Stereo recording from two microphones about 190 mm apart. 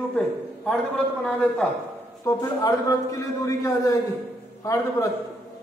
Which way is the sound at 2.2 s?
15° left (ahead or behind).